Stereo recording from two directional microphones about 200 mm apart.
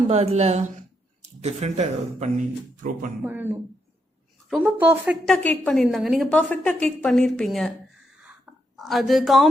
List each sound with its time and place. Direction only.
0.1 s speech: 35° right (ahead or behind)
3.2 s a woman's voice: 10° right (ahead or behind)
5.2 s a woman's voice: 5° left (ahead or behind)
8.7 s a woman's voice: centre (ahead or behind)